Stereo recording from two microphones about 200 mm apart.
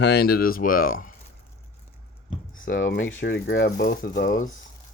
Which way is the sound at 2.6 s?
50° left (ahead or behind).